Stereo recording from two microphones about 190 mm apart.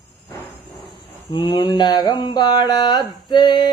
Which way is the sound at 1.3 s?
25° left (ahead or behind).